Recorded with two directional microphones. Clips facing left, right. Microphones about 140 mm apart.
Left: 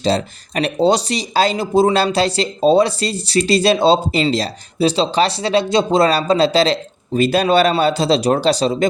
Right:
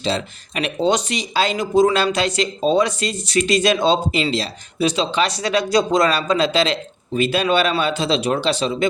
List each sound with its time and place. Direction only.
0.0 s speech: 40° left (ahead or behind)